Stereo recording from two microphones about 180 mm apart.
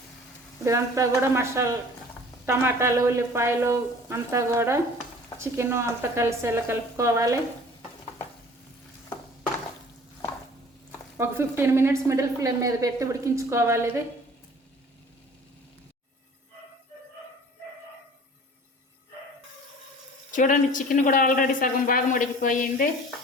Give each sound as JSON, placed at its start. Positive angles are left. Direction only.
{"t": 0.6, "sound": "a woman's voice", "side_deg": -15}
{"t": 11.2, "sound": "a woman's voice", "side_deg": -15}
{"t": 20.3, "sound": "speech", "side_deg": 45}